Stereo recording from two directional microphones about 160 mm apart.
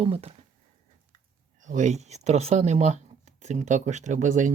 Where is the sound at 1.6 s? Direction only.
50° right (ahead or behind).